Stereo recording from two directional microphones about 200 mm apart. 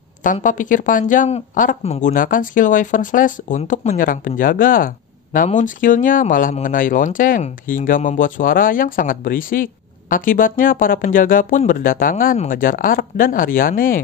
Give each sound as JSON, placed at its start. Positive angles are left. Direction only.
{"t": 0.2, "sound": "speech", "side_deg": 40}